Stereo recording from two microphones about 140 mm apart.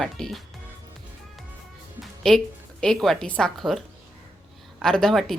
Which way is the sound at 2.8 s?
5° left (ahead or behind).